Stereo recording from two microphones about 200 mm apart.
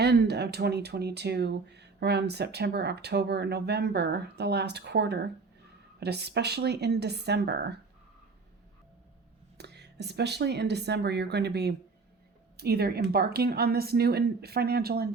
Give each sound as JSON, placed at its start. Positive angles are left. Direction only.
{"t": 0.0, "sound": "speech", "side_deg": -55}
{"t": 9.6, "sound": "a woman's voice", "side_deg": -55}